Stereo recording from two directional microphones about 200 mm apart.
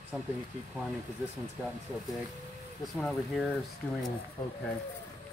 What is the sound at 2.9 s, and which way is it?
Speech, centre (ahead or behind).